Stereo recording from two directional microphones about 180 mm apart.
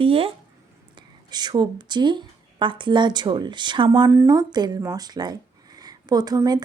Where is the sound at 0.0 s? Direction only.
30° right (ahead or behind).